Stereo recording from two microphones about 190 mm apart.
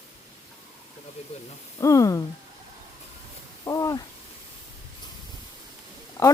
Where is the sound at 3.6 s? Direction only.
20° left (ahead or behind).